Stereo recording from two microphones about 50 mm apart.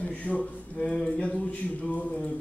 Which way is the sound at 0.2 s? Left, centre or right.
Left.